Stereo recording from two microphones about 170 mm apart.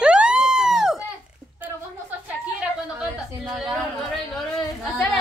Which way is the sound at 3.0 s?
5° right (ahead or behind).